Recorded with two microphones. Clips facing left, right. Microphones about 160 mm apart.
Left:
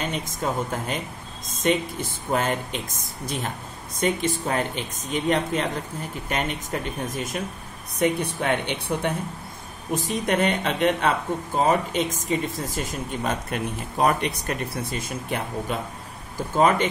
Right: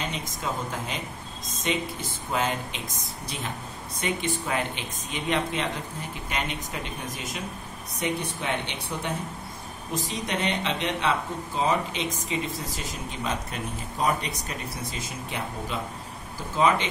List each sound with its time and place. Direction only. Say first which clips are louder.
0.1 s speech: left 5 dB; 50° left (ahead or behind)
8.0 s speech: left 6 dB; 55° left (ahead or behind)